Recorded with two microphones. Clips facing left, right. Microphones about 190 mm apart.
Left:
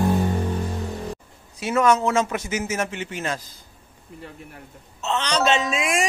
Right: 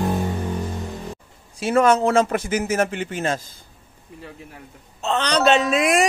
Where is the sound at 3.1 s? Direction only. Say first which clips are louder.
Right 4 dB; 30° right (ahead or behind).